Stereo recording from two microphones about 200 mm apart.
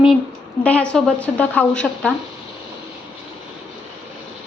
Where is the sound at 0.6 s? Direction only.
5° left (ahead or behind).